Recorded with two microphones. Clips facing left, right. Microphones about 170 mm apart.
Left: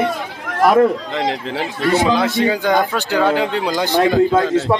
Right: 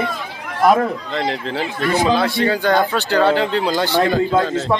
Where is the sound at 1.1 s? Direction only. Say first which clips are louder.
Left 1 dB; 15° left (ahead or behind).